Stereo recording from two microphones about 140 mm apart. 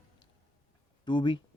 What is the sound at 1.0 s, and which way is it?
Speech, 35° left (ahead or behind).